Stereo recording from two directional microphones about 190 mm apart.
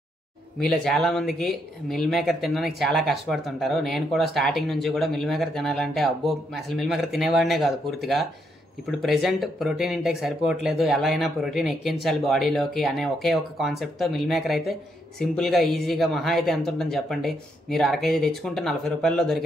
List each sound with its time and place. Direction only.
0.6 s speech: centre (ahead or behind)